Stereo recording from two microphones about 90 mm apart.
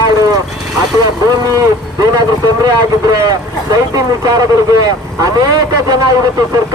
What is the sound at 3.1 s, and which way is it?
Speech, 45° right (ahead or behind).